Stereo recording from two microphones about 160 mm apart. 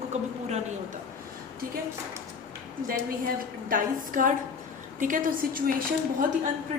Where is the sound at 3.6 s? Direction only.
55° right (ahead or behind).